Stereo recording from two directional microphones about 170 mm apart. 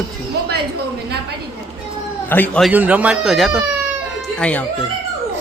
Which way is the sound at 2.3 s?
10° left (ahead or behind).